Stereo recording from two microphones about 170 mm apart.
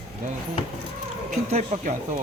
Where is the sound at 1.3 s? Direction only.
40° right (ahead or behind).